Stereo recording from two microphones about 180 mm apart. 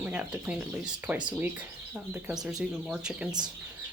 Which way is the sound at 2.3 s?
5° right (ahead or behind).